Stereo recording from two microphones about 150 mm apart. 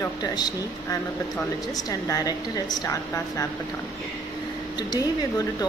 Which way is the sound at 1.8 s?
25° left (ahead or behind).